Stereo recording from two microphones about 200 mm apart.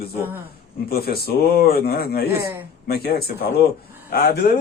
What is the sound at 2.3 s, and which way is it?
Speech, 10° right (ahead or behind).